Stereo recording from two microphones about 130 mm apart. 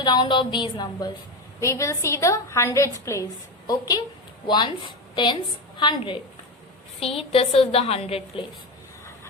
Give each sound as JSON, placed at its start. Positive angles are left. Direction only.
{"t": 0.0, "sound": "a woman's voice", "side_deg": 35}
{"t": 1.6, "sound": "a woman's voice", "side_deg": 25}
{"t": 7.2, "sound": "a woman's voice", "side_deg": 50}